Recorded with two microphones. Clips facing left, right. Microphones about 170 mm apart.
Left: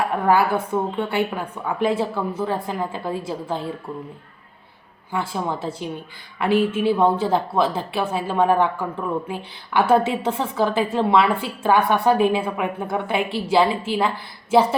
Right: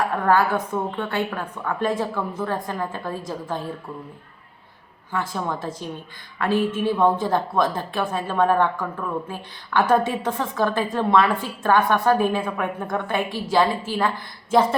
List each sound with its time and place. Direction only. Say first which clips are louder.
0.1 s a woman's voice: left 1 dB; 10° left (ahead or behind)
5.1 s a woman's voice: left 1 dB; 10° left (ahead or behind)